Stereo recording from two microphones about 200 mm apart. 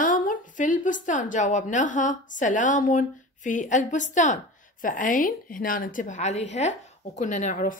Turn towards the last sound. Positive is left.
turn(degrees=40)  # may be behind; listen again after turning